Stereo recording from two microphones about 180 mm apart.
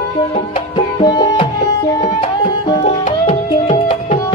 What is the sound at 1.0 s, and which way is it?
Music, 25° left (ahead or behind).